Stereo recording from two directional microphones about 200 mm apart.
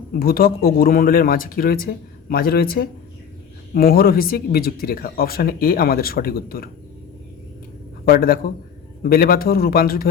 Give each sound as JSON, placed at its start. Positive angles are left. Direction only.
{"t": 0.1, "sound": "speech", "side_deg": 45}
{"t": 8.0, "sound": "speech", "side_deg": 45}